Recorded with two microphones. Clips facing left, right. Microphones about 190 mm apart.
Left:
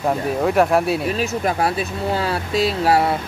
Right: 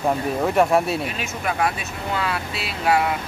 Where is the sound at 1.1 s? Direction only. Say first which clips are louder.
Left 6 dB; 35° left (ahead or behind).